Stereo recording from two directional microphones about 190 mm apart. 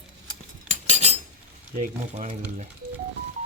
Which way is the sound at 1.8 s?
35° right (ahead or behind).